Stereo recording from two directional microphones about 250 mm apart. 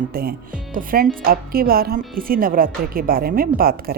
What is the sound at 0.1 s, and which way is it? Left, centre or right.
A woman's voice, right.